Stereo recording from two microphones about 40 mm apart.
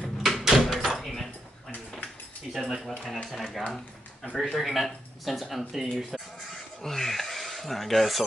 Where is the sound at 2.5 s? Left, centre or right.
Centre.